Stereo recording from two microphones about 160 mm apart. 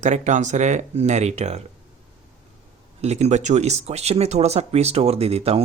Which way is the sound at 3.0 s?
45° right (ahead or behind).